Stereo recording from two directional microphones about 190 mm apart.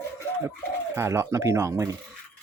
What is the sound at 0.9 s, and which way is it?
Speech, 15° right (ahead or behind).